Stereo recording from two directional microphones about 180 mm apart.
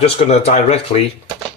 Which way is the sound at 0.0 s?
35° left (ahead or behind).